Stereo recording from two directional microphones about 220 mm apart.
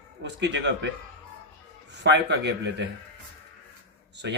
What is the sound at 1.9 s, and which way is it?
A man's voice, 50° right (ahead or behind).